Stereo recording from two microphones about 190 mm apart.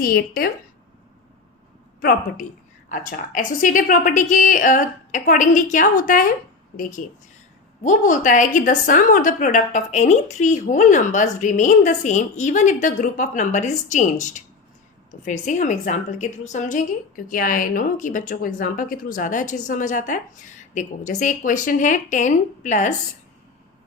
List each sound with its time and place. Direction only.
0.0 s a woman's voice: 50° left (ahead or behind)
2.0 s a woman's voice: 55° left (ahead or behind)
7.9 s a woman's voice: 40° left (ahead or behind)